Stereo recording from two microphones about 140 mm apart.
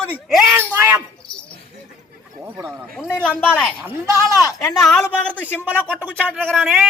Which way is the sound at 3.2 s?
5° left (ahead or behind).